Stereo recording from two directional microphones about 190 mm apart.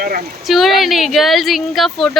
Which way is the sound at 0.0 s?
50° right (ahead or behind).